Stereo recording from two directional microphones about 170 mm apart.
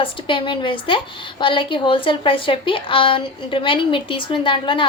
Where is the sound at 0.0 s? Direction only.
30° left (ahead or behind).